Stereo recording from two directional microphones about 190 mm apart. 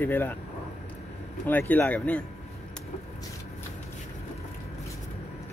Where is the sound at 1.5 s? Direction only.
10° left (ahead or behind).